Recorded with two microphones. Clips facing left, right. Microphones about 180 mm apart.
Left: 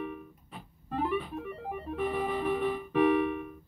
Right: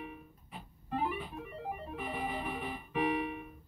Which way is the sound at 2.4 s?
55° left (ahead or behind).